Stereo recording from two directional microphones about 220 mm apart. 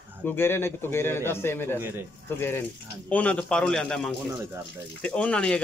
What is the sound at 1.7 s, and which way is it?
Speech, 10° right (ahead or behind).